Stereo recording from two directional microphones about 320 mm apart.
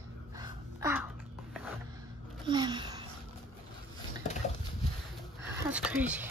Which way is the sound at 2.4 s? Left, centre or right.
Centre.